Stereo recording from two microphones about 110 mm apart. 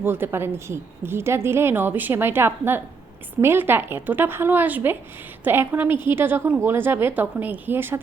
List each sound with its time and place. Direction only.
0.0 s a woman's voice: 20° right (ahead or behind)